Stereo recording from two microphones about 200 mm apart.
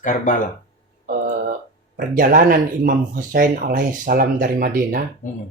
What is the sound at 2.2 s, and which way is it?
Speech, 45° right (ahead or behind).